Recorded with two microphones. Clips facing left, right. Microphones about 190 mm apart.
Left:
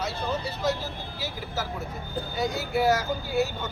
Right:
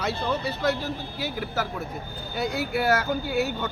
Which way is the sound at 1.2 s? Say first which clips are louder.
Right 3 dB; 60° right (ahead or behind).